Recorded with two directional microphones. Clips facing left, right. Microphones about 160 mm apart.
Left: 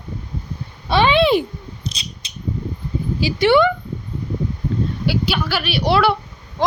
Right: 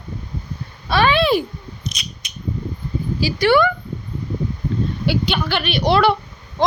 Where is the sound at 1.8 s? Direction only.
30° left (ahead or behind).